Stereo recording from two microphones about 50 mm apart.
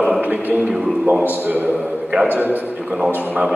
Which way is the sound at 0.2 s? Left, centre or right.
Right.